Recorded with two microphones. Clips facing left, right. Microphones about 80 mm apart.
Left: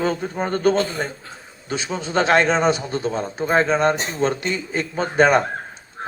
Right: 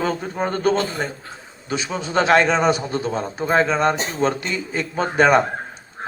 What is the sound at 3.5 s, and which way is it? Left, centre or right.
Speech, left.